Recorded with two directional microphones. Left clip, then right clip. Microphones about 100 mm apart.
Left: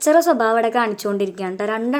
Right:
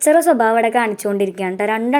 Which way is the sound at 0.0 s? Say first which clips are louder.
Right 2 dB; 10° right (ahead or behind).